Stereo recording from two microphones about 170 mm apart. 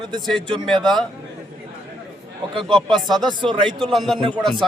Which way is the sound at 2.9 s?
Centre (ahead or behind).